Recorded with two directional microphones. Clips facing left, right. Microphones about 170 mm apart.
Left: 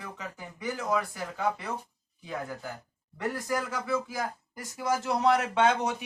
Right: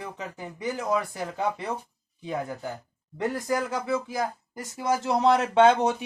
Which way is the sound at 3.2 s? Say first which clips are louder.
Right 4 dB; 20° right (ahead or behind).